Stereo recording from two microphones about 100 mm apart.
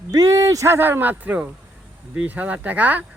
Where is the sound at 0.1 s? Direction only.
35° right (ahead or behind).